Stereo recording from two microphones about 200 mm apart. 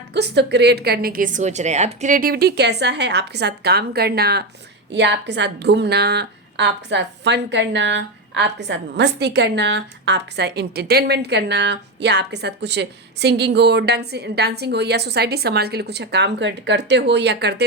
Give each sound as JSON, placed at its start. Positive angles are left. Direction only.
{"t": 0.1, "sound": "a woman's voice", "side_deg": -55}